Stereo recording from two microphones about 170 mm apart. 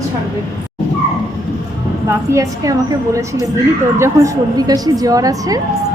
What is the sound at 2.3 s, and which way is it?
Speech, 20° right (ahead or behind).